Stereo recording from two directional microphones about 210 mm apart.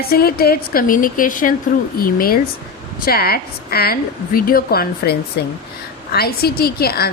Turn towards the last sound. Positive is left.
turn(degrees=50)  # may be behind; listen again after turning